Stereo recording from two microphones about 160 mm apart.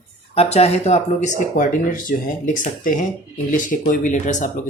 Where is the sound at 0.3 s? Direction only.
40° left (ahead or behind).